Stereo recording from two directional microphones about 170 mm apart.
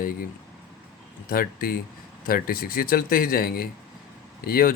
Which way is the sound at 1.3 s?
60° left (ahead or behind).